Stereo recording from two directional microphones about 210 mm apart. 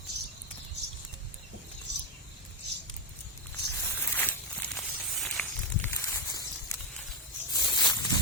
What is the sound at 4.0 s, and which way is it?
Zipper, 10° left (ahead or behind).